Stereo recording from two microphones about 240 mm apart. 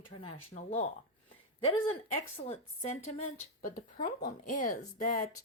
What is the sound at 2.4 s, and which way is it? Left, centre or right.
A woman's voice, left.